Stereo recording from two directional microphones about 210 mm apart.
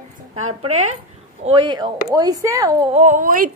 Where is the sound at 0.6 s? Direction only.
90° right.